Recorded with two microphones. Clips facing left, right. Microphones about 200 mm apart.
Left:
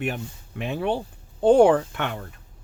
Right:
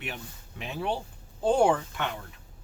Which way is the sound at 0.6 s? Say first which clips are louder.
Left 6 dB; 55° left (ahead or behind).